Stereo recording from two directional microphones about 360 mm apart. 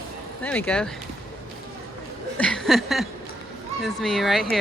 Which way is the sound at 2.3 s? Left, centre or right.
Centre.